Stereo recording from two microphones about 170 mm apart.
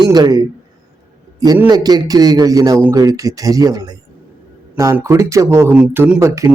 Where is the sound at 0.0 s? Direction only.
25° right (ahead or behind).